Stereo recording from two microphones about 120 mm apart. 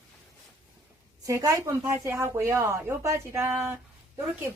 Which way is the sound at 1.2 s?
30° right (ahead or behind).